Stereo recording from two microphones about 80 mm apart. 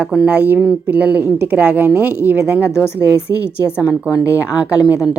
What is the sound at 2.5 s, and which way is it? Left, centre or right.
A woman's voice, left.